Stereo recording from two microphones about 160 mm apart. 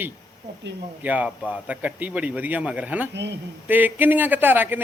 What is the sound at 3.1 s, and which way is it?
Speech, 90° right.